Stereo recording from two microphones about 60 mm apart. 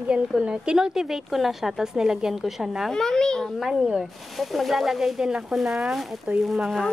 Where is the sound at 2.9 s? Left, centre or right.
Centre.